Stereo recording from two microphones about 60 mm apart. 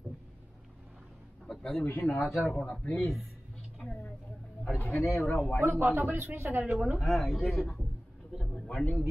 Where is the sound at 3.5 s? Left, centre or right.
Centre.